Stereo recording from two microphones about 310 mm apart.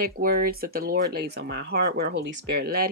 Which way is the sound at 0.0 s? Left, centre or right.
Right.